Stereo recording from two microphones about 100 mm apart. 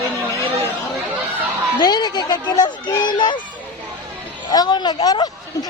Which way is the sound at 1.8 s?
45° left (ahead or behind).